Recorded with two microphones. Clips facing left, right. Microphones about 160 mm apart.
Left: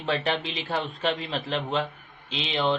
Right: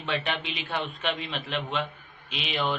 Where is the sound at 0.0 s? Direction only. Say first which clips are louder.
Left 4 dB; 35° left (ahead or behind).